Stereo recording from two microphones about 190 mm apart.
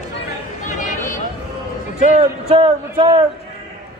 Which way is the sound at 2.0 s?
30° right (ahead or behind).